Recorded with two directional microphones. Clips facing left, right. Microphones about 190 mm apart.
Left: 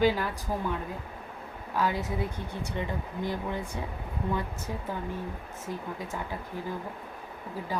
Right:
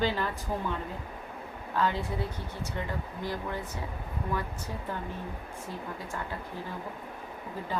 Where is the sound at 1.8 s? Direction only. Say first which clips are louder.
Left 1 dB; 10° left (ahead or behind).